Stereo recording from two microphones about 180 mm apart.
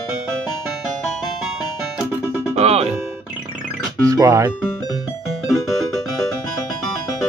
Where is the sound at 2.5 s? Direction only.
35° right (ahead or behind).